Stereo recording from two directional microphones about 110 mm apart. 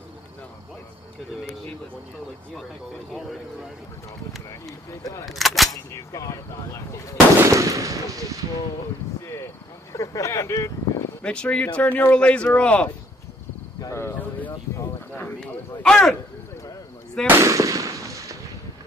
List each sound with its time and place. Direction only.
3.1 s speech: centre (ahead or behind)
5.2 s speech: centre (ahead or behind)
5.9 s speech: 30° left (ahead or behind)
7.3 s speech: 30° right (ahead or behind)
9.9 s speech: 30° left (ahead or behind)
11.2 s speech: 10° left (ahead or behind)
13.7 s cricket: 25° left (ahead or behind)
15.1 s a sound: 15° left (ahead or behind)
17.3 s firecracker: 25° right (ahead or behind)